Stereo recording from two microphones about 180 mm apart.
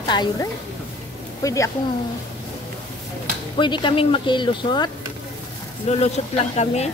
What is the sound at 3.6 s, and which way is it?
Speech, 25° left (ahead or behind).